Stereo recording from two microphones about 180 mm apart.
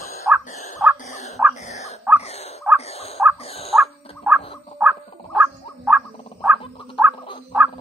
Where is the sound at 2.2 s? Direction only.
35° left (ahead or behind).